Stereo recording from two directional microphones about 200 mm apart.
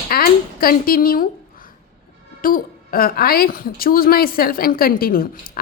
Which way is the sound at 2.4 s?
45° left (ahead or behind).